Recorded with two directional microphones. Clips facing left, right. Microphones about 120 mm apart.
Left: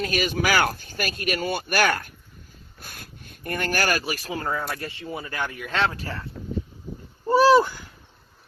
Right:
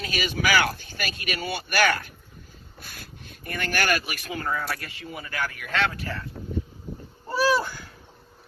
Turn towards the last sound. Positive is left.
turn(degrees=15)  # may be behind; listen again after turning